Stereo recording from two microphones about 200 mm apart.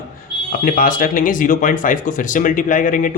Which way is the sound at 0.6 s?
45° left (ahead or behind).